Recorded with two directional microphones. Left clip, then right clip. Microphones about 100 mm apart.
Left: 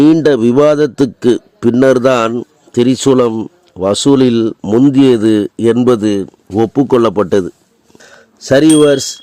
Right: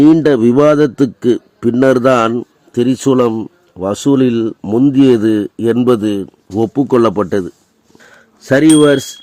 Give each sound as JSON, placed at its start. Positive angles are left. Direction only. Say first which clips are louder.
{"t": 0.0, "sound": "a man's voice", "louder": "even", "side_deg": 40}
{"t": 6.5, "sound": "speech", "louder": "left 2 dB", "side_deg": 30}
{"t": 8.4, "sound": "chime", "louder": "left 1 dB", "side_deg": 25}